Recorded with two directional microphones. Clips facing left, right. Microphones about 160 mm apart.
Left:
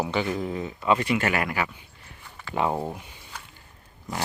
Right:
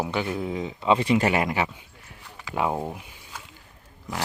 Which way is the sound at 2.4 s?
5° right (ahead or behind).